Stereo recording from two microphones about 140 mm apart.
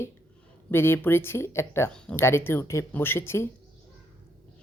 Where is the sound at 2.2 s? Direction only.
15° left (ahead or behind).